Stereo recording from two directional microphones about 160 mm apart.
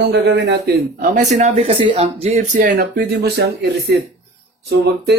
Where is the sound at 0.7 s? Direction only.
55° right (ahead or behind).